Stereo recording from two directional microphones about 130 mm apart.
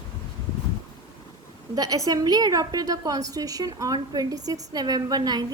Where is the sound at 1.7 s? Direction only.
30° right (ahead or behind).